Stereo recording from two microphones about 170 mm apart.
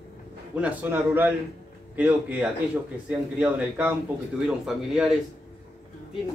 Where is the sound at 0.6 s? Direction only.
10° right (ahead or behind).